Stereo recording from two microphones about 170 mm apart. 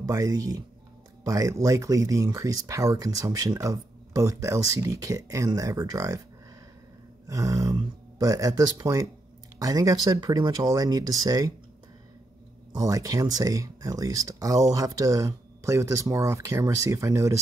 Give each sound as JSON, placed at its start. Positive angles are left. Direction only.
{"t": 0.0, "sound": "speech", "side_deg": -20}
{"t": 7.2, "sound": "speech", "side_deg": -20}
{"t": 12.7, "sound": "speech", "side_deg": -20}